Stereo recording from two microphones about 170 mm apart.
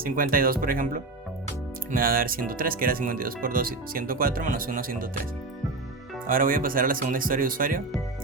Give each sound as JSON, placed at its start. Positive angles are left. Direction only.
{"t": 0.0, "sound": "speech", "side_deg": -60}
{"t": 6.2, "sound": "speech", "side_deg": -55}